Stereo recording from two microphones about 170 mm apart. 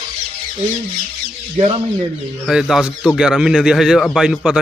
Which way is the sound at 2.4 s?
5° right (ahead or behind).